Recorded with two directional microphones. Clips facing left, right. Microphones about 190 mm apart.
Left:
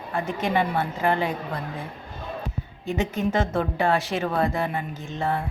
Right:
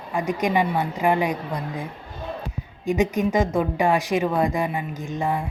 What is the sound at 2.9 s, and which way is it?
A woman's voice, 15° right (ahead or behind).